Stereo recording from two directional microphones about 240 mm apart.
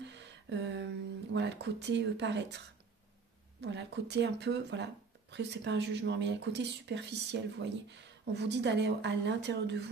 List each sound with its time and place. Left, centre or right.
0.0 s a sound: right
1.3 s speech: right
3.6 s speech: right